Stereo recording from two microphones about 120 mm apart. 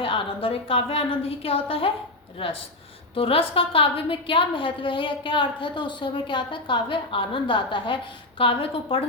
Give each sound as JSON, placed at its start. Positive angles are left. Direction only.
{"t": 0.0, "sound": "a woman's voice", "side_deg": 45}